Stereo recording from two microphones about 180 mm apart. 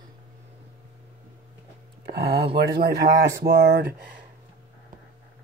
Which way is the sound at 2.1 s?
65° right (ahead or behind).